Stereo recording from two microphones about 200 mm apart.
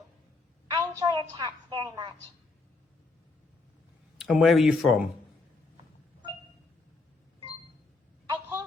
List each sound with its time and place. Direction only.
0.7 s a woman's voice: 20° right (ahead or behind)
4.2 s speech: centre (ahead or behind)
8.3 s a sound: 15° right (ahead or behind)